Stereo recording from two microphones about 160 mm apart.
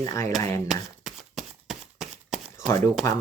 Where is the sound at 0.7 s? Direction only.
Centre (ahead or behind).